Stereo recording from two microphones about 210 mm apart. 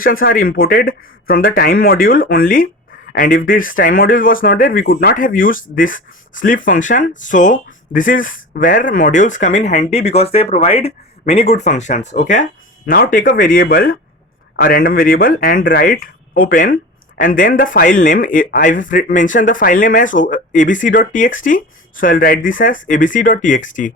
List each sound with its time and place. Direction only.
0.0 s speech: 45° left (ahead or behind)